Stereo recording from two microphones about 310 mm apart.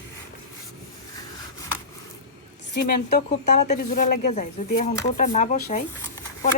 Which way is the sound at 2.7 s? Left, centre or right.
Left.